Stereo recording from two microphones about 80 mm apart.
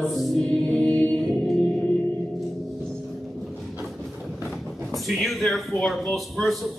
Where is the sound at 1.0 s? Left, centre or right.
Centre.